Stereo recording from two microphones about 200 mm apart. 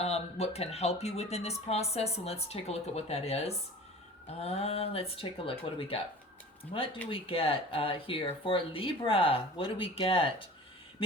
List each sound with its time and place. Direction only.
0.0 s speech: 30° left (ahead or behind)